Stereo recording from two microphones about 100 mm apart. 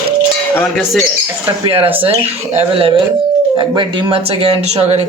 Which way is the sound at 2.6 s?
65° right (ahead or behind).